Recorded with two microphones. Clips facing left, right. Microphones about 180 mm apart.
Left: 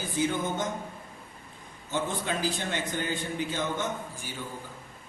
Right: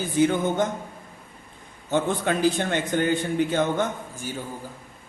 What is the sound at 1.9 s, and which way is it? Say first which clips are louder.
A man's voice: right 7 dB; 60° right (ahead or behind).